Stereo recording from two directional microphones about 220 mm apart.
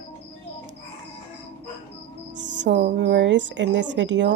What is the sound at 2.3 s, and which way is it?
Music, 55° right (ahead or behind).